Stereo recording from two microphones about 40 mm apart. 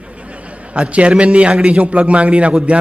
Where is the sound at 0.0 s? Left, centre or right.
Right.